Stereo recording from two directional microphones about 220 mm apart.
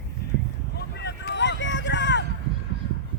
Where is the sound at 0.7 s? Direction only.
50° left (ahead or behind).